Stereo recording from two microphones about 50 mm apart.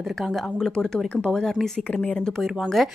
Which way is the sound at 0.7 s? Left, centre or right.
Centre.